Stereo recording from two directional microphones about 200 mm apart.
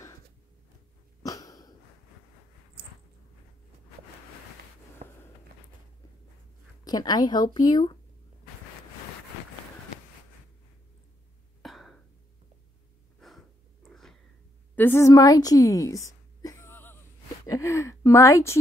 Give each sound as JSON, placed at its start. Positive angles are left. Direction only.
{"t": 1.2, "sound": "cough", "side_deg": 15}
{"t": 5.0, "sound": "walk", "side_deg": -30}
{"t": 6.8, "sound": "speech", "side_deg": 20}
{"t": 11.6, "sound": "throat clearing", "side_deg": 0}
{"t": 13.8, "sound": "a sound", "side_deg": 0}
{"t": 14.8, "sound": "a sound", "side_deg": 10}
{"t": 17.5, "sound": "speech", "side_deg": 15}